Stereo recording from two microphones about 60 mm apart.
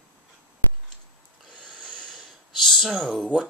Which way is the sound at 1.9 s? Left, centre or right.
Centre.